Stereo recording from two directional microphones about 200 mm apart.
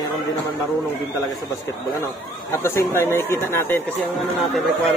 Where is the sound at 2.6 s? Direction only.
10° left (ahead or behind).